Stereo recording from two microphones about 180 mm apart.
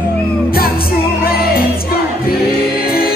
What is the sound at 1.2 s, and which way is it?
Music, 55° left (ahead or behind).